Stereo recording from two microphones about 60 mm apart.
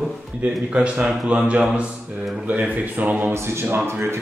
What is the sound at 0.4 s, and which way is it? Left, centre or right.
A man's voice, centre.